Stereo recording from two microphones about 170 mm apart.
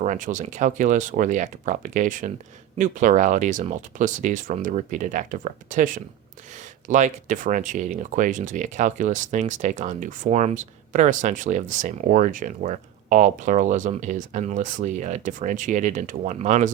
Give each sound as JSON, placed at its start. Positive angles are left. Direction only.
{"t": 0.0, "sound": "speech", "side_deg": -45}